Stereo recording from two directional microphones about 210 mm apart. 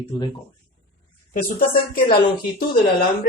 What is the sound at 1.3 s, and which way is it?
Speech, 40° left (ahead or behind).